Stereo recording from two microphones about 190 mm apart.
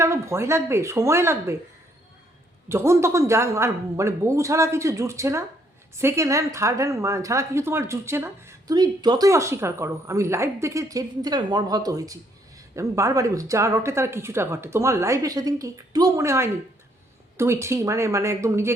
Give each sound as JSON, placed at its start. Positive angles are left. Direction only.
{"t": 0.0, "sound": "a woman's voice", "side_deg": -15}
{"t": 2.6, "sound": "a woman's voice", "side_deg": -15}